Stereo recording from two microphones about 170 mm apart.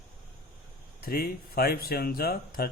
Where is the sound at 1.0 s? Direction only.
60° left (ahead or behind).